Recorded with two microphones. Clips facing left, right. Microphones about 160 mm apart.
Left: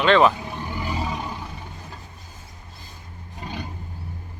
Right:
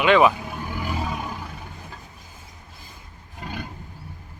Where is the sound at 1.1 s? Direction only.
5° right (ahead or behind).